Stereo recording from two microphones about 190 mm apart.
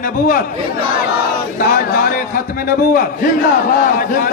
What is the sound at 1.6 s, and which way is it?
A man's voice, 50° left (ahead or behind).